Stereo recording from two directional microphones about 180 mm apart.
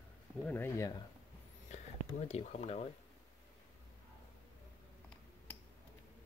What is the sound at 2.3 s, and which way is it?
Speech, 35° left (ahead or behind).